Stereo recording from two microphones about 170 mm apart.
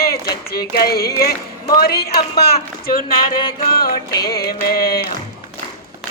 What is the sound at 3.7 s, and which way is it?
Speech, 60° left (ahead or behind).